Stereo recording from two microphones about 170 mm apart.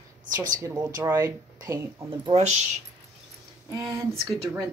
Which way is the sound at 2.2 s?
40° right (ahead or behind).